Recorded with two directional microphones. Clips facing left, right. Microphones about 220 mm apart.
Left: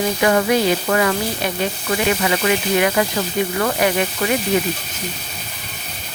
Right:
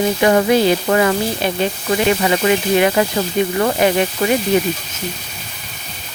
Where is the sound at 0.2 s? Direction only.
25° right (ahead or behind).